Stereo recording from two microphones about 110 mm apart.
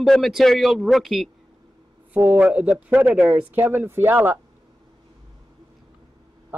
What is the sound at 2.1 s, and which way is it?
A man's voice, 15° right (ahead or behind).